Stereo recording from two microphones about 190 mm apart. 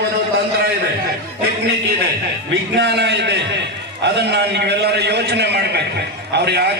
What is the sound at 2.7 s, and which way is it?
A man's voice, 65° right (ahead or behind).